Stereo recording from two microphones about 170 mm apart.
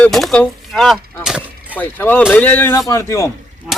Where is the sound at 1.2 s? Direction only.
5° right (ahead or behind).